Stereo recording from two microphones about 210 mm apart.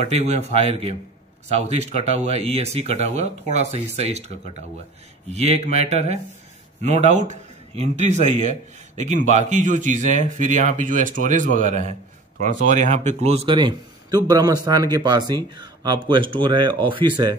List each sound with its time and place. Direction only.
0.1 s a man's voice: 30° right (ahead or behind)